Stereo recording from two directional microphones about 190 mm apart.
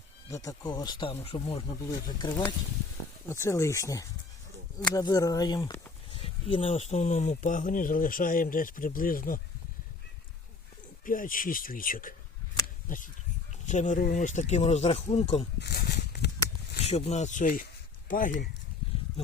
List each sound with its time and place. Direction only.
0.3 s speech: 15° left (ahead or behind)
1.9 s speech: 20° left (ahead or behind); by 9.4 s 50° left (ahead or behind)
11.0 s speech: 45° left (ahead or behind)
12.6 s a sound: 45° left (ahead or behind)
13.7 s speech: 40° left (ahead or behind)
15.6 s a sound: 55° left (ahead or behind)
16.8 s speech: 35° left (ahead or behind)